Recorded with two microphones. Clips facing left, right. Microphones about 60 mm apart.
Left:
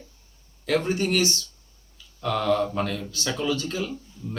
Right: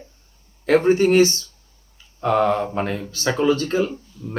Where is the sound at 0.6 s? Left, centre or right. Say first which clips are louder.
Right 9 dB; right.